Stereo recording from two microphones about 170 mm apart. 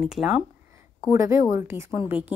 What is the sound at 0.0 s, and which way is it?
Speech, centre (ahead or behind).